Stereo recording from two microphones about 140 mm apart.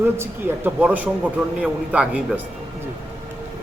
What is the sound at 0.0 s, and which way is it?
A man's voice, 15° right (ahead or behind).